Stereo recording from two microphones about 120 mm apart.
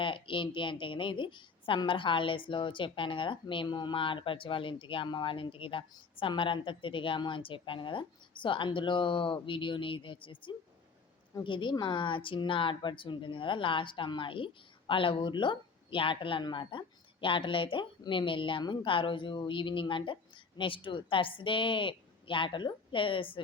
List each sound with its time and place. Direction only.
0.0 s speech: 45° left (ahead or behind)